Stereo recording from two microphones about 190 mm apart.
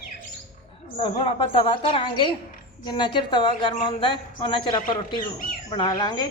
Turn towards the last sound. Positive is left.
turn(degrees=25)  # may be behind; listen again after turning